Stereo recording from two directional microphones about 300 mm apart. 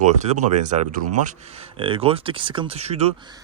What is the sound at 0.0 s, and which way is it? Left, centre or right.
A man's voice, right.